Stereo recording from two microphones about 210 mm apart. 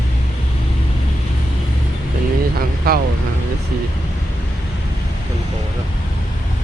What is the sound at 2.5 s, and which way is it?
Vehicle, 45° right (ahead or behind).